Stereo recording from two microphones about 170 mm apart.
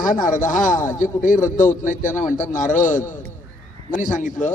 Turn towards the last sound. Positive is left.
turn(degrees=50)  # may be behind; listen again after turning